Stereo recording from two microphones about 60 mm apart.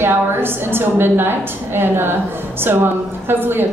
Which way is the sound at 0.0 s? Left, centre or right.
Right.